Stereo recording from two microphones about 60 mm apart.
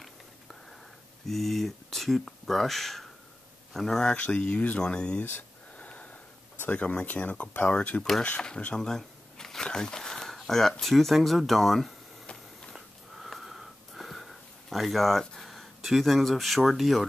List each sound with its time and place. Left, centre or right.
1.2 s speech: centre
5.8 s a sound: left
6.6 s speech: left; by 11.9 s centre
12.7 s wheeze: centre